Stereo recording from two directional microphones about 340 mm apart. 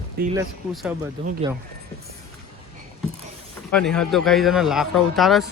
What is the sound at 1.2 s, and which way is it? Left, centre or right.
Speech, centre.